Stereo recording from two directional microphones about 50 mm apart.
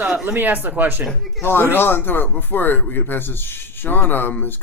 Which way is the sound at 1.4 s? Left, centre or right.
Left.